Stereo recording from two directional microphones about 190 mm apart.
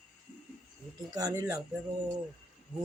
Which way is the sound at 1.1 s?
20° right (ahead or behind).